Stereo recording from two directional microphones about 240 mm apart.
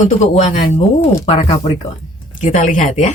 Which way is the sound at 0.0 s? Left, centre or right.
Left.